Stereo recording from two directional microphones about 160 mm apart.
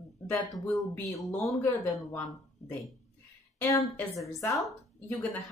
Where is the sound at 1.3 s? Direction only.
15° left (ahead or behind).